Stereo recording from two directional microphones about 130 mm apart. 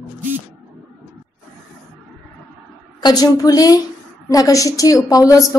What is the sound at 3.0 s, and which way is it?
A woman's voice, 30° left (ahead or behind).